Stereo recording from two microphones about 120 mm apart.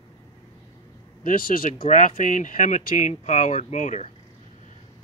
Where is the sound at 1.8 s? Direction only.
90° left.